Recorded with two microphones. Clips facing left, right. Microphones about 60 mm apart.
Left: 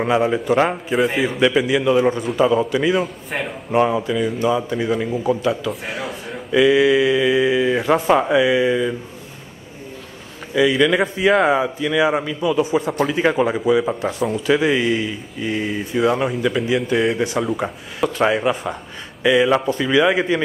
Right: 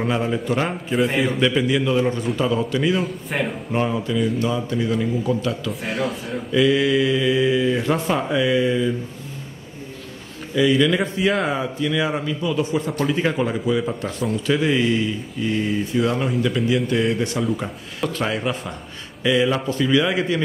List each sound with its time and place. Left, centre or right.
0.5 s a man's voice: centre
1.5 s a man's voice: centre
3.8 s speech: centre
10.5 s speech: centre